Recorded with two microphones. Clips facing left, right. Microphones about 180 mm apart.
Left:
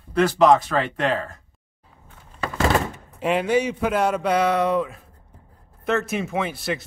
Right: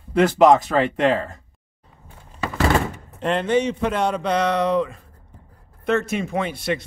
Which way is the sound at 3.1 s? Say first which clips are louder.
Even; 10° left (ahead or behind).